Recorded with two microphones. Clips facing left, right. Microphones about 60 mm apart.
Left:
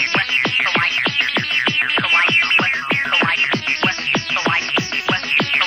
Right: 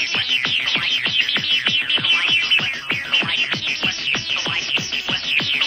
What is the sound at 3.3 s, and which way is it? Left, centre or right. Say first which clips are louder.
Music: left 5 dB; left.